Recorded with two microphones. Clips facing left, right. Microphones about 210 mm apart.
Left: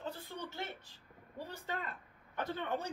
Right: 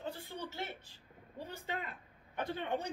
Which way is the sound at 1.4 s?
25° right (ahead or behind).